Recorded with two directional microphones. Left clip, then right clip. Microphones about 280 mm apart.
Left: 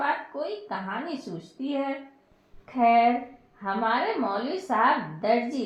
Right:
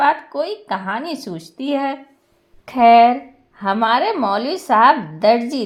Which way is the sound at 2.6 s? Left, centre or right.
Right.